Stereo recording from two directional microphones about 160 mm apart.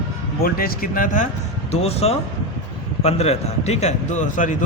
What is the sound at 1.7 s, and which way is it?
Speech, 40° left (ahead or behind).